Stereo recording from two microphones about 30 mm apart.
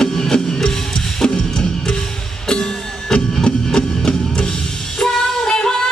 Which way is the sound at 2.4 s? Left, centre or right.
Left.